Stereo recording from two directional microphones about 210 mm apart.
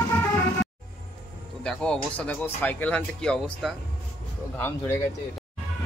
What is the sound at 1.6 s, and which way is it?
Speech, 5° left (ahead or behind).